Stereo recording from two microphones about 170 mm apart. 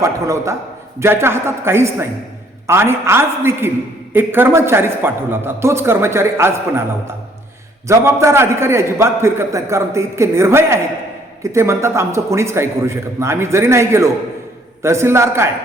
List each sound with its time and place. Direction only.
0.0 s a man's voice: 20° right (ahead or behind)
7.9 s a man's voice: 15° right (ahead or behind)